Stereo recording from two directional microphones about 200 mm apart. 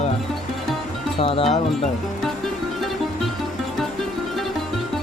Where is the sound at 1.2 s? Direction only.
25° left (ahead or behind).